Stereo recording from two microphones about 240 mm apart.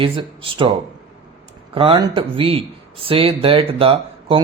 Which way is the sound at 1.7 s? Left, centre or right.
Right.